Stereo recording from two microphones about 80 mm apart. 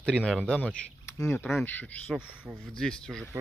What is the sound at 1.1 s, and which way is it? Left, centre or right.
Speech, left.